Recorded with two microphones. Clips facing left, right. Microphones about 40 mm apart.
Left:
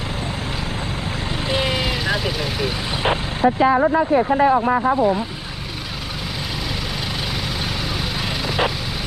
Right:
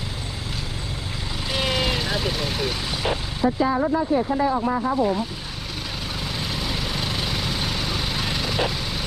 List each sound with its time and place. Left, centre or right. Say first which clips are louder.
1.5 s vehicle: left 2 dB; centre
3.0 s speech: left 6 dB; left
8.4 s vehicle: left 5 dB; centre